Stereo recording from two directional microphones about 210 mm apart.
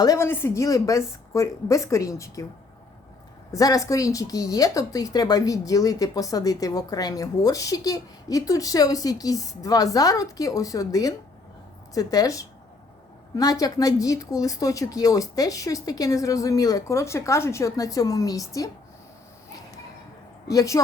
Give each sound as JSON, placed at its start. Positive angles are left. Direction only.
{"t": 0.0, "sound": "a woman's voice", "side_deg": 15}
{"t": 3.5, "sound": "a woman's voice", "side_deg": 15}
{"t": 20.5, "sound": "a woman's voice", "side_deg": 15}